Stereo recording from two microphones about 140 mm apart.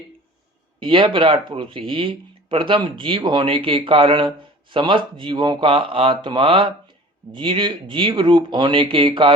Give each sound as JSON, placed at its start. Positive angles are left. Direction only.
{"t": 0.8, "sound": "speech", "side_deg": -40}